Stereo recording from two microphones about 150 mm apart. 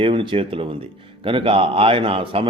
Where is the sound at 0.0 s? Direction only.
35° right (ahead or behind).